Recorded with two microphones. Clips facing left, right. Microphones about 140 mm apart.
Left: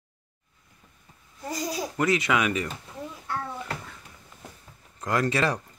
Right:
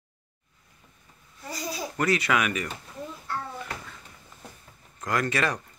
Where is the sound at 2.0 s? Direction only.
20° left (ahead or behind).